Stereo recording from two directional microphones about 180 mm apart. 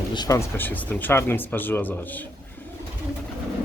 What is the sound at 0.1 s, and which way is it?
Speech, 20° left (ahead or behind).